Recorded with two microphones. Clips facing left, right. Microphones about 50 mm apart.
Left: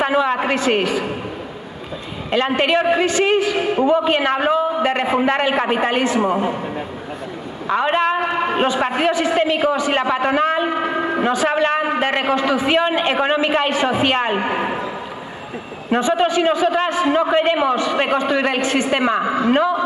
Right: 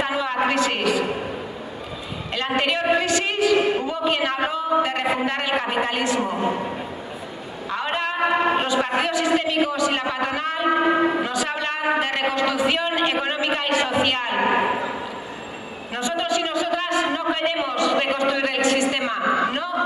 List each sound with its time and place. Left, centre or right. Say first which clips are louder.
0.0 s a sound: left 5 dB; left
2.3 s a man's voice: left 6 dB; left
7.7 s a man's voice: left 8 dB; left
15.9 s a man's voice: left 7 dB; left